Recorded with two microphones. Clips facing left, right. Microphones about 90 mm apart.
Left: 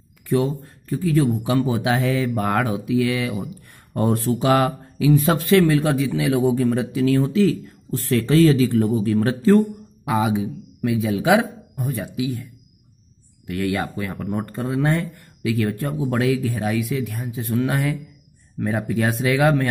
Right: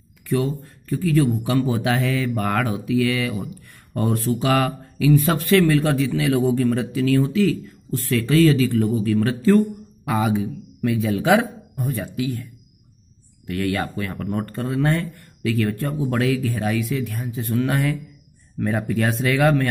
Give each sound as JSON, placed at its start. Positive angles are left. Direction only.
{"t": 0.3, "sound": "speech", "side_deg": 20}
{"t": 13.5, "sound": "speech", "side_deg": 10}